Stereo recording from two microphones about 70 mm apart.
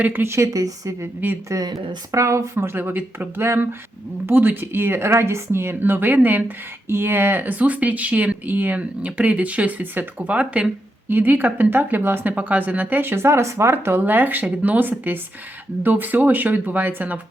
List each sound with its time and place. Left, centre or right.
0.0 s speech: right
0.3 s speech: right
14.0 s speech: right